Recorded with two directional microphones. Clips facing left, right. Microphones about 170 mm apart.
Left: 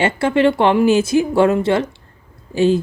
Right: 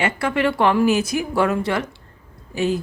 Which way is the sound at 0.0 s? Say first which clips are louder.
Left 6 dB; 25° left (ahead or behind).